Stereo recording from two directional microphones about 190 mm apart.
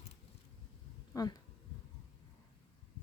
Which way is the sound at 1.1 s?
20° left (ahead or behind).